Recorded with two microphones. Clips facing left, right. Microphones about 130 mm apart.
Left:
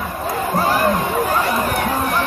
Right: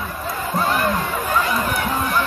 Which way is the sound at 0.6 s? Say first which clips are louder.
Left 2 dB; 35° left (ahead or behind).